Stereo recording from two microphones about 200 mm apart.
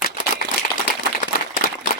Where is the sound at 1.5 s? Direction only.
45° left (ahead or behind).